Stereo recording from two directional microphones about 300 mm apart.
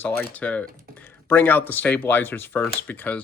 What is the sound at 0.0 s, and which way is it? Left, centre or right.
Speech, centre.